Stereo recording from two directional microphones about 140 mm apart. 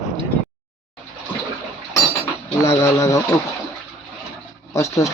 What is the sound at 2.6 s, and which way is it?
Speech, 20° left (ahead or behind).